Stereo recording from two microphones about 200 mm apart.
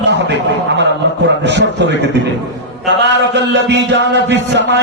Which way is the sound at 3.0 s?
60° right (ahead or behind).